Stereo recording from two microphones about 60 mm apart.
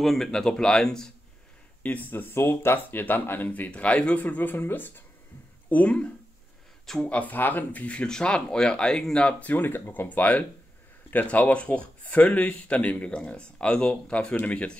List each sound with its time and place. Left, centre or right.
0.0 s speech: centre
1.8 s speech: left
5.7 s speech: left
9.4 s speech: left
10.0 s speech: left